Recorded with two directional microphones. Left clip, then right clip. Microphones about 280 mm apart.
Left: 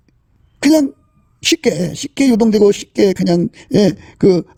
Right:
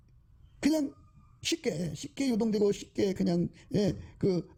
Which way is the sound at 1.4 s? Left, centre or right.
Left.